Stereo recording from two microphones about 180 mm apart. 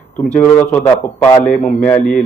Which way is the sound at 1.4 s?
50° left (ahead or behind).